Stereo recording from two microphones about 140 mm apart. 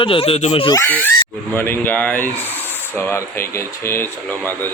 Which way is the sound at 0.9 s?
10° left (ahead or behind).